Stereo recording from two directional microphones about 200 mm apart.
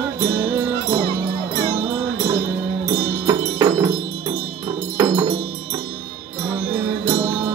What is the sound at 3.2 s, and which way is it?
Music, 15° right (ahead or behind).